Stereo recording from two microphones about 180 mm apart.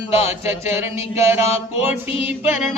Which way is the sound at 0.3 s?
35° left (ahead or behind).